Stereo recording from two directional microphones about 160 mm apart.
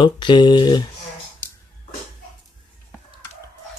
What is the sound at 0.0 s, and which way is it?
Speech, 30° left (ahead or behind).